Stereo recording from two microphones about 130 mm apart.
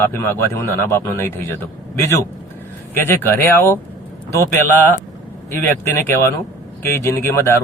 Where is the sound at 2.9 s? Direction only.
15° left (ahead or behind).